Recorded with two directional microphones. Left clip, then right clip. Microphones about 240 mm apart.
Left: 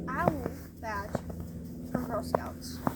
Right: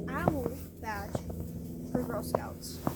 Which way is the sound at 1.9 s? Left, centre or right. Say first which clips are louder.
Left 1 dB; left.